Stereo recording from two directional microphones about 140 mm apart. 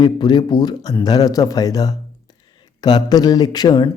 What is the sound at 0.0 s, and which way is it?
Speech, 30° left (ahead or behind).